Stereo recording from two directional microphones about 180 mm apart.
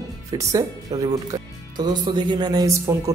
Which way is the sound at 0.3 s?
20° right (ahead or behind).